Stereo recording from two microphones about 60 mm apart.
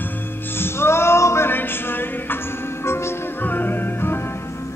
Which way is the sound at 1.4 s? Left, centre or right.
Left.